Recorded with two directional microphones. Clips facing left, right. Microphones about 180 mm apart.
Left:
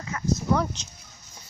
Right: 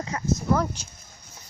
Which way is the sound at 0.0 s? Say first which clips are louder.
Right 3 dB; 30° right (ahead or behind).